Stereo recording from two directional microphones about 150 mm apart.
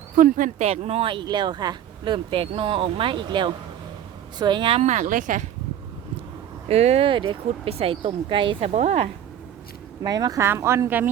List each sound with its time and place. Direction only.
0.2 s speech: 60° right (ahead or behind)
0.7 s speech: 45° right (ahead or behind)
4.8 s speech: 50° right (ahead or behind)
6.7 s speech: 45° right (ahead or behind)
10.0 s speech: 25° right (ahead or behind)